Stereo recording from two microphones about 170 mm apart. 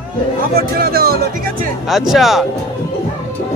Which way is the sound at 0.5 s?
65° right (ahead or behind).